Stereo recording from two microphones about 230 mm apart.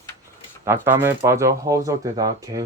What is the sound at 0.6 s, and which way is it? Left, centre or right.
Speech, centre.